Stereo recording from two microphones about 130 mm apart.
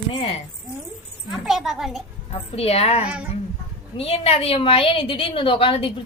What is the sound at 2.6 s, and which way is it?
A woman's voice, 50° left (ahead or behind).